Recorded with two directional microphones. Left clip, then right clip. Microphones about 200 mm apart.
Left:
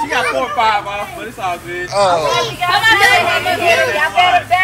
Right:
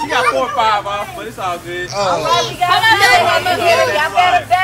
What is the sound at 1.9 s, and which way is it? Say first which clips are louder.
Speech: left 4 dB; 15° right (ahead or behind).